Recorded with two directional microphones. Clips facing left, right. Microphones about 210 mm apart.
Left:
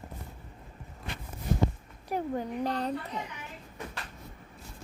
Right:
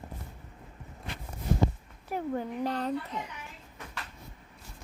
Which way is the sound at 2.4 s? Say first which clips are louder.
Even; 15° left (ahead or behind).